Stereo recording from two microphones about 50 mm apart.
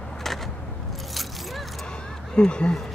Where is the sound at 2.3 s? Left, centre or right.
Centre.